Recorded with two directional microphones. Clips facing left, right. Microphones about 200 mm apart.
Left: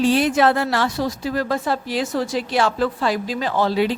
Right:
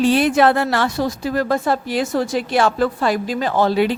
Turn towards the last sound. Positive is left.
turn(degrees=-55)  # may be behind; listen again after turning